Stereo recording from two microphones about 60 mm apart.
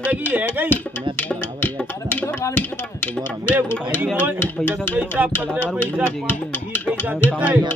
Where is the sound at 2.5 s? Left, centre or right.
Left.